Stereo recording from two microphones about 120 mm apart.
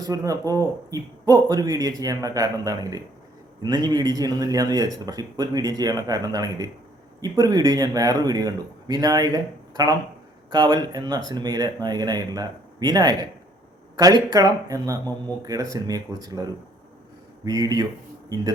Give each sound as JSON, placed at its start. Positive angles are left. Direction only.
{"t": 0.0, "sound": "speech", "side_deg": -30}